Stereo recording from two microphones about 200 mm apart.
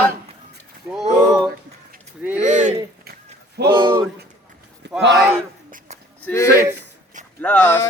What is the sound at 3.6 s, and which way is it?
Speech, 20° right (ahead or behind).